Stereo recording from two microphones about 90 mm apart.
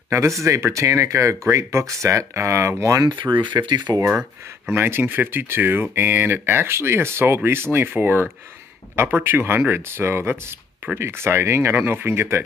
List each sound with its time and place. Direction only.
0.1 s speech: 35° right (ahead or behind)
3.2 s speech: 60° right (ahead or behind)
4.6 s speech: 25° right (ahead or behind)